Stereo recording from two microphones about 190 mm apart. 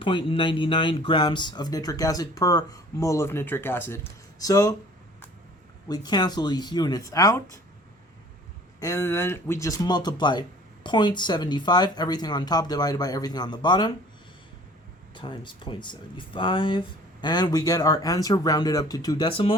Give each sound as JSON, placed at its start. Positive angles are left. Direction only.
{"t": 0.0, "sound": "speech", "side_deg": 25}
{"t": 5.9, "sound": "speech", "side_deg": 20}
{"t": 8.8, "sound": "speech", "side_deg": 15}
{"t": 15.1, "sound": "speech", "side_deg": 25}